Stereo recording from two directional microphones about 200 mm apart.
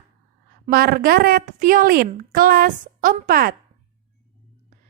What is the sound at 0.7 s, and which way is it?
A woman's voice, 50° right (ahead or behind).